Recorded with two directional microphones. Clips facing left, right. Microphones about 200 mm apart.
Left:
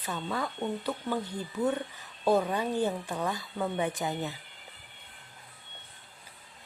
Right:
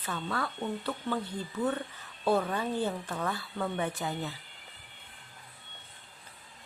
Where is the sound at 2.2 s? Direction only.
15° left (ahead or behind).